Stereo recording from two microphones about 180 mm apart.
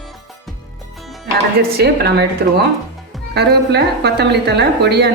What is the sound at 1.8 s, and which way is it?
A woman's voice, 65° right (ahead or behind).